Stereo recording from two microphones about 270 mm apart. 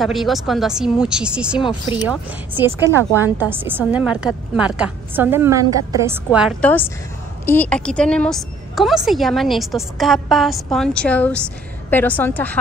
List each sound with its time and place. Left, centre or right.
0.0 s a woman's voice: centre
1.6 s speech: centre
2.0 s a woman's voice: centre